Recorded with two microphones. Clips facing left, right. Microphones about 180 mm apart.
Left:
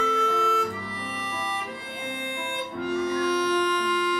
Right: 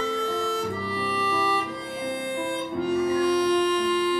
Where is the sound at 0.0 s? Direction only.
35° right (ahead or behind).